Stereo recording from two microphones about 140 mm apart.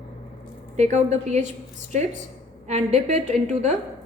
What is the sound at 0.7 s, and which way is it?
A woman's voice, 55° right (ahead or behind).